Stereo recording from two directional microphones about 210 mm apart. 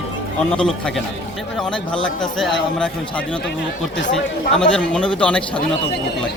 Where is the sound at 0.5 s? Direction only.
5° left (ahead or behind).